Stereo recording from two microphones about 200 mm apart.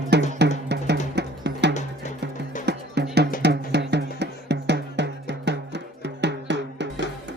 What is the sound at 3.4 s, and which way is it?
Drum, 55° right (ahead or behind).